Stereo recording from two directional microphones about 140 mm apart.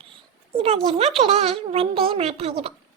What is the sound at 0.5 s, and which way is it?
A child's voice, 45° right (ahead or behind).